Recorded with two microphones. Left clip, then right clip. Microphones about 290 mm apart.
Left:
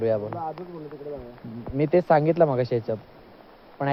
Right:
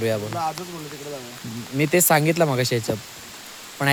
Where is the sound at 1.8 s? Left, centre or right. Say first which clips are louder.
Right 1 dB; centre.